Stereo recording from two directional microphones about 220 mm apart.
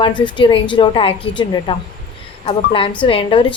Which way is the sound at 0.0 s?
20° left (ahead or behind).